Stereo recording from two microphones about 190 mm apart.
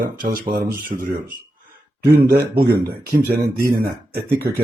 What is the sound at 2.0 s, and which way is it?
A man's voice, 60° right (ahead or behind).